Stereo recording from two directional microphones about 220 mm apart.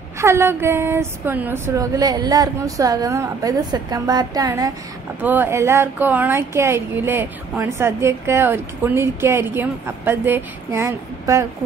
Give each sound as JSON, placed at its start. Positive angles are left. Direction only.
{"t": 0.2, "sound": "speech", "side_deg": -10}